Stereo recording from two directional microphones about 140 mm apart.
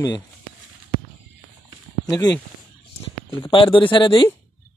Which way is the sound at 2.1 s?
30° left (ahead or behind).